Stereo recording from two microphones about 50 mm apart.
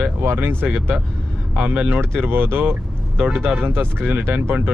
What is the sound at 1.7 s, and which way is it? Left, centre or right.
Speech, right.